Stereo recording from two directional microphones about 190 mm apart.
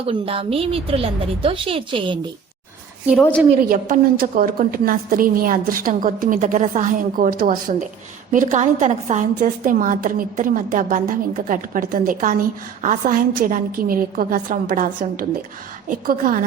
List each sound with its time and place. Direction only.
0.1 s a woman's voice: 30° right (ahead or behind)
3.5 s a woman's voice: 45° right (ahead or behind)